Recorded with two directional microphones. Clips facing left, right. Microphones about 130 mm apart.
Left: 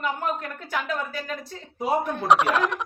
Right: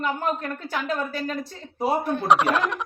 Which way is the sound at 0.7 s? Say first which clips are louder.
Right 1 dB; 30° right (ahead or behind).